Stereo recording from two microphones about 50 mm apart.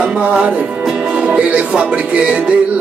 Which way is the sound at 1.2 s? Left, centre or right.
Right.